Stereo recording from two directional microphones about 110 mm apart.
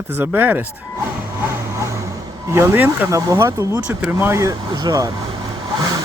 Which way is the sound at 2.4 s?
25° right (ahead or behind).